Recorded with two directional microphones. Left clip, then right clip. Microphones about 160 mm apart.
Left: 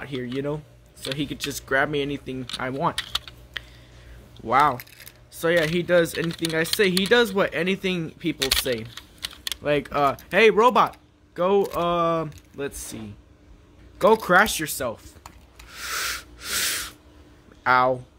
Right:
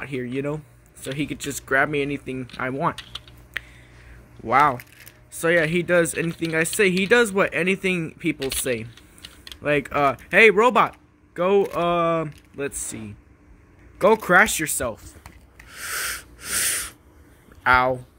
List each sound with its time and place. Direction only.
0.0 s speech: 20° right (ahead or behind)
3.0 s speech: 40° left (ahead or behind)
4.5 s speech: 25° right (ahead or behind)
9.2 s typing: 50° left (ahead or behind)
9.6 s speech: 20° right (ahead or behind)
15.7 s rub: 10° right (ahead or behind)
17.6 s speech: 5° right (ahead or behind)